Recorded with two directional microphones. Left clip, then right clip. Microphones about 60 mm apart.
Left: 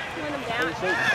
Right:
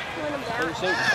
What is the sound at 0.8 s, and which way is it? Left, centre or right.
Basketball bounce, centre.